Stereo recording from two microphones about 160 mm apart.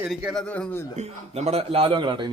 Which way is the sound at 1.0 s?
40° right (ahead or behind).